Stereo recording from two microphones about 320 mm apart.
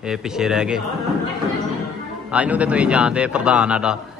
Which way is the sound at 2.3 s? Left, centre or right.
Centre.